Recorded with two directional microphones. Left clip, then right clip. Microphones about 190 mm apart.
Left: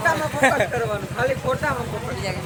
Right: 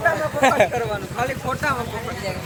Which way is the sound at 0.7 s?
35° right (ahead or behind).